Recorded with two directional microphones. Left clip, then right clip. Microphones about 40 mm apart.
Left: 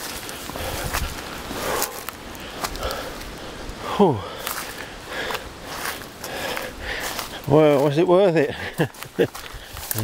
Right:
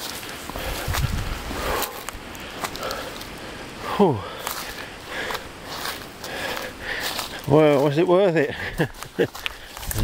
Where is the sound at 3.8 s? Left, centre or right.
Centre.